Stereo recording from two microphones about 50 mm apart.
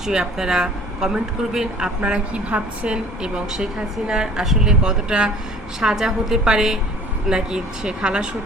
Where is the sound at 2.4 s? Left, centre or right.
Right.